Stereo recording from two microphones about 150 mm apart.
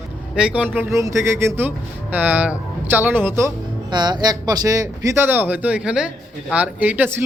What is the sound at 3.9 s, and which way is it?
Speech, 30° right (ahead or behind).